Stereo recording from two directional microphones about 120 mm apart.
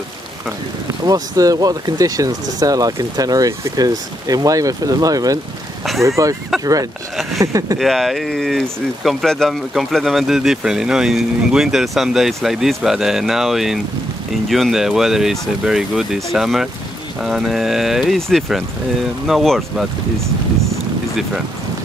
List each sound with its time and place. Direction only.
1.0 s speech: 30° right (ahead or behind)
7.8 s speech: centre (ahead or behind)